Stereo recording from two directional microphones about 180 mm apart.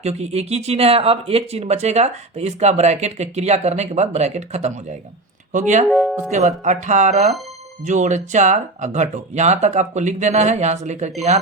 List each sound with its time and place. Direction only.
0.0 s speech: 35° right (ahead or behind)
5.9 s speech: centre (ahead or behind)
6.7 s speech: 40° right (ahead or behind)